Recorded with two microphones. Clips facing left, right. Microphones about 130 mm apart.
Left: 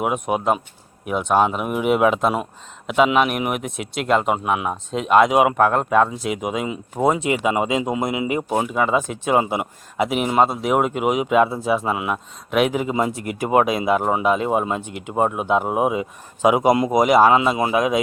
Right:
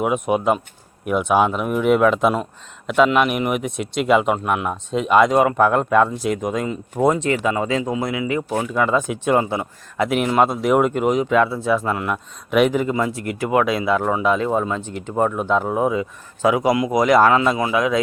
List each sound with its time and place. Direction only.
0.0 s speech: centre (ahead or behind)
7.3 s speech: 15° left (ahead or behind)
8.7 s speech: 5° left (ahead or behind)
9.4 s speech: 15° left (ahead or behind)
10.1 s speech: 5° left (ahead or behind)
12.9 s speech: 20° left (ahead or behind)
17.6 s speech: 25° left (ahead or behind)